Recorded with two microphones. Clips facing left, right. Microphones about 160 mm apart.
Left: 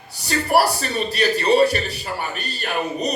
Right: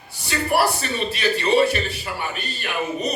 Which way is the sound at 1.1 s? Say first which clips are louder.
Left 3 dB; 40° left (ahead or behind).